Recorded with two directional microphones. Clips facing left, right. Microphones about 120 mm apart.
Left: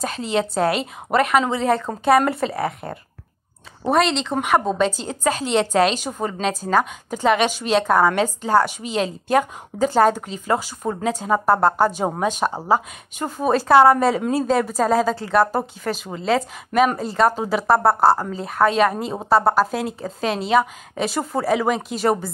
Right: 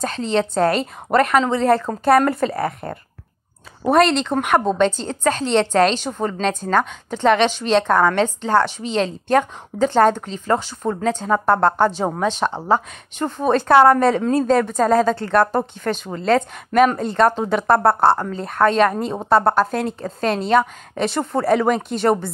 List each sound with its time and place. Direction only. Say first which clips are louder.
0.0 s a woman's voice: right 2 dB; 10° left (ahead or behind)